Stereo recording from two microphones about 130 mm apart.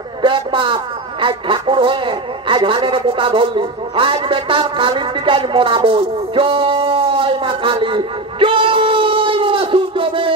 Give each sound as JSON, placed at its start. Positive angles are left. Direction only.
{"t": 0.2, "sound": "a man's voice", "side_deg": -40}